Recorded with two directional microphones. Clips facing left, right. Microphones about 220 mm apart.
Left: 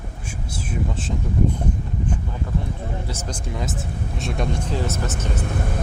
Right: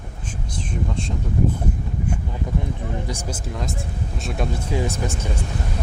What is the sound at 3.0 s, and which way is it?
Speech, 15° right (ahead or behind).